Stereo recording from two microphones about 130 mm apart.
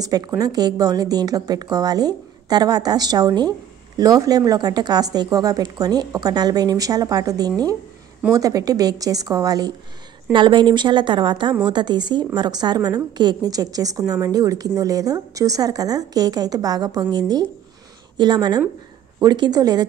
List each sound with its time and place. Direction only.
0.0 s speech: 30° right (ahead or behind)